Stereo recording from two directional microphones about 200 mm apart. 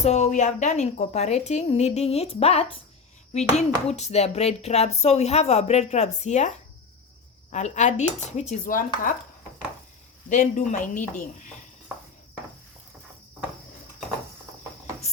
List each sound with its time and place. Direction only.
0.0 s speech: 35° left (ahead or behind)
7.5 s speech: 35° left (ahead or behind)
10.2 s speech: 40° left (ahead or behind)